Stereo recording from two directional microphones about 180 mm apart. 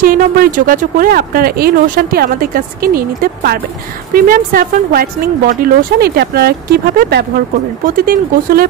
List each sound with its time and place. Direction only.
0.0 s speech: 50° right (ahead or behind)